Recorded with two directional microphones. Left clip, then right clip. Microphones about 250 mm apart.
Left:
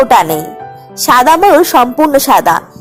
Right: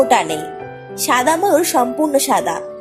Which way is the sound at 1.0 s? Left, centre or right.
Left.